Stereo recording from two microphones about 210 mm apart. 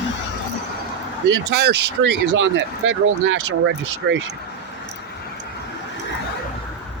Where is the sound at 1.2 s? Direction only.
55° right (ahead or behind).